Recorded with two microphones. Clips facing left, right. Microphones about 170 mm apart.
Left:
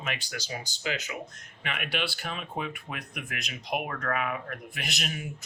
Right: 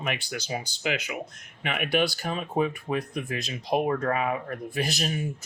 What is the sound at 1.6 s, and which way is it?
Speech, 50° right (ahead or behind).